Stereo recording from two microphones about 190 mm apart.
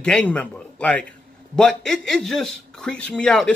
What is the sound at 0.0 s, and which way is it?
A man's voice, 5° left (ahead or behind).